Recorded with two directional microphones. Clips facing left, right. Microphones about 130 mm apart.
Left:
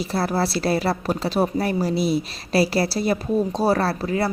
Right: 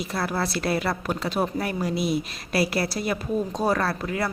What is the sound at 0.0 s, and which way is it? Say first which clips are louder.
Speech: left 4 dB; 30° left (ahead or behind).